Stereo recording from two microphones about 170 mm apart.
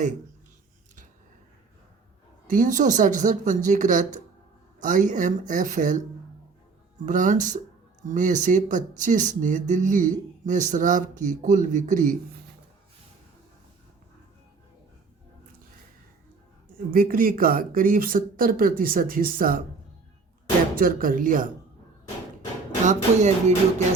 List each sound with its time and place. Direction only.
2.5 s speech: 50° right (ahead or behind)
7.0 s speech: 50° right (ahead or behind)
16.7 s speech: 55° right (ahead or behind)
20.7 s speech: 55° right (ahead or behind)
22.8 s speech: 45° right (ahead or behind)